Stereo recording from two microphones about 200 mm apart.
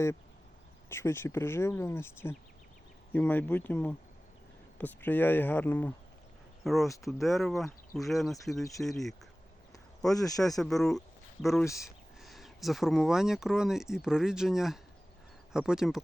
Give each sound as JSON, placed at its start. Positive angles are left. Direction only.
{"t": 0.9, "sound": "speech", "side_deg": 15}
{"t": 10.1, "sound": "speech", "side_deg": 15}
{"t": 10.5, "sound": "speech", "side_deg": 0}